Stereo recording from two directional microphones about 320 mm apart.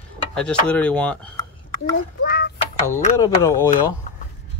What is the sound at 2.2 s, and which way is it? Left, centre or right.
Clock, left.